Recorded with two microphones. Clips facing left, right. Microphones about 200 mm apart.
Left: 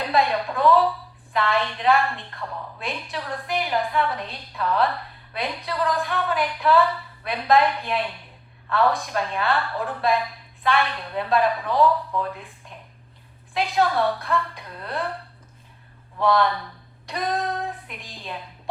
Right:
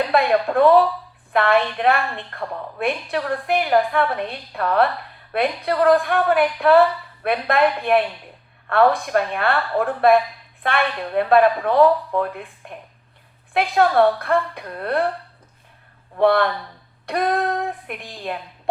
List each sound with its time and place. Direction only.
0.1 s a woman's voice: 60° right (ahead or behind)
16.1 s a woman's voice: 60° right (ahead or behind)